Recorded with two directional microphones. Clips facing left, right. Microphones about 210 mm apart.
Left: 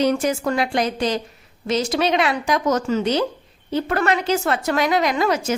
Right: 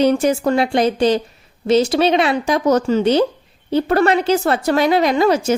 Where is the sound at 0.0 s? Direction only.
30° right (ahead or behind).